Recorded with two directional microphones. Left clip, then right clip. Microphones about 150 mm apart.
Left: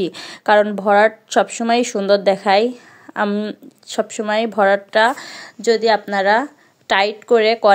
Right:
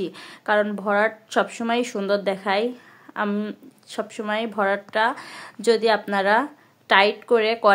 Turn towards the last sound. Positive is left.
turn(degrees=25)  # may be behind; listen again after turning